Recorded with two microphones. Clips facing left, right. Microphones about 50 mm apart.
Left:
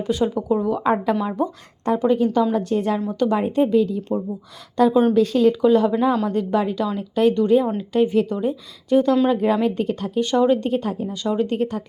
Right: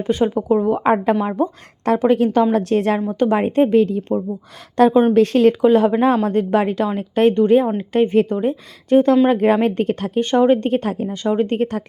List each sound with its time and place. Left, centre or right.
0.0 s speech: right
1.2 s a woman's voice: right
2.0 s speech: right
3.1 s speech: right